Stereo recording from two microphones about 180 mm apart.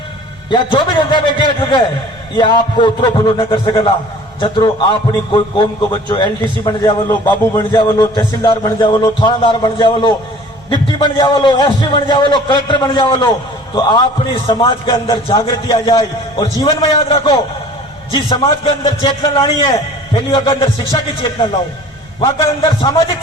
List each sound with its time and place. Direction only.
0.5 s a man's voice: 25° left (ahead or behind)